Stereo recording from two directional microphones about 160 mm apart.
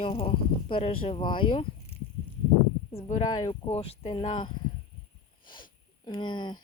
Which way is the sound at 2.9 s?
45° left (ahead or behind).